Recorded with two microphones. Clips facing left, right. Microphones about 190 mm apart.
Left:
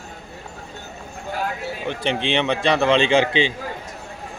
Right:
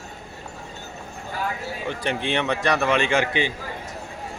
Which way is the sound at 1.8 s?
20° left (ahead or behind).